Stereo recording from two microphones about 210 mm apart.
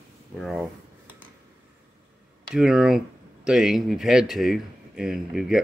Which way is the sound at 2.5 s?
5° right (ahead or behind).